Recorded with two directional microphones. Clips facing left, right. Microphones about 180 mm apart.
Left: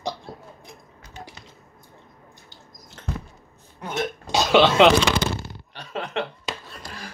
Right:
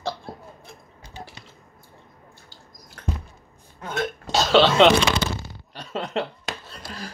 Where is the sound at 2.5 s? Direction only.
20° left (ahead or behind).